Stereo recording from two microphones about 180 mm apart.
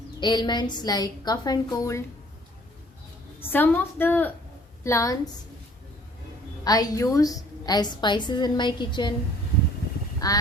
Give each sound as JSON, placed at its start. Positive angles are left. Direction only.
{"t": 0.2, "sound": "a woman's voice", "side_deg": 25}
{"t": 3.4, "sound": "a woman's voice", "side_deg": 10}
{"t": 6.7, "sound": "a woman's voice", "side_deg": 20}
{"t": 10.2, "sound": "a woman's voice", "side_deg": 20}